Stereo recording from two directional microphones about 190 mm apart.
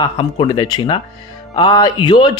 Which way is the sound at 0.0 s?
25° left (ahead or behind).